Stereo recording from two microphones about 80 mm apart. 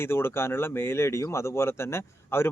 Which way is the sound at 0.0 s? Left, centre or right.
Left.